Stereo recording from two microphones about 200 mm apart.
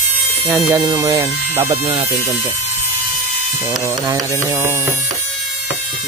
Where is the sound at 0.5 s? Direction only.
15° right (ahead or behind).